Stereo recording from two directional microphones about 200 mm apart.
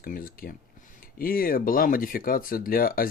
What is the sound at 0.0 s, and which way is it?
Speech, 45° left (ahead or behind).